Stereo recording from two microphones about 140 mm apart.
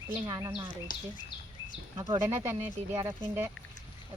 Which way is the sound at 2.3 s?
20° right (ahead or behind).